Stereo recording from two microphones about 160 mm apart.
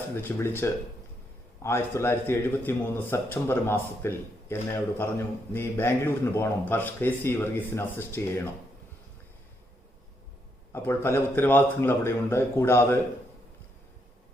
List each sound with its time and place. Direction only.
0.1 s a man's voice: 15° left (ahead or behind)
10.7 s a man's voice: 15° left (ahead or behind)